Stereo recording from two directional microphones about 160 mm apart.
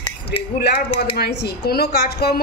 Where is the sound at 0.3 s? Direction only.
90° left.